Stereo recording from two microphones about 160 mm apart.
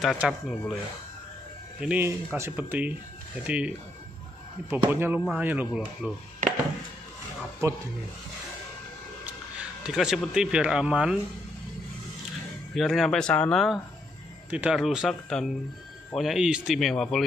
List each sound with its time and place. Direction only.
0.3 s speech: centre (ahead or behind)
1.8 s speech: 10° right (ahead or behind)
7.6 s speech: 20° right (ahead or behind)
9.2 s speech: 5° right (ahead or behind)
12.7 s speech: centre (ahead or behind)